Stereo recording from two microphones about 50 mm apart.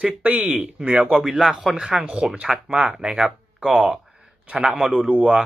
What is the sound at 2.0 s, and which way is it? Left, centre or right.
Speech, right.